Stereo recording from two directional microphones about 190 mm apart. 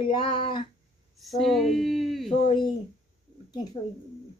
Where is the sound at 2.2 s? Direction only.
35° left (ahead or behind).